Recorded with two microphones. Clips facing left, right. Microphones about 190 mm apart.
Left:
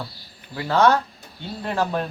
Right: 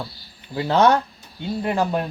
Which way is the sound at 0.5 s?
20° right (ahead or behind).